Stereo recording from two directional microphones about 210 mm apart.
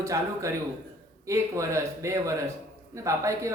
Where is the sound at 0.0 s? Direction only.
15° right (ahead or behind).